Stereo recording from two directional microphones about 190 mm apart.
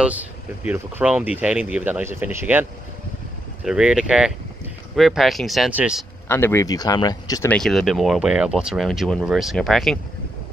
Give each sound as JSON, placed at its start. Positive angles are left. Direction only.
{"t": 0.0, "sound": "speech", "side_deg": -10}
{"t": 3.6, "sound": "speech", "side_deg": -5}
{"t": 6.2, "sound": "speech", "side_deg": 15}
{"t": 7.5, "sound": "speech", "side_deg": 0}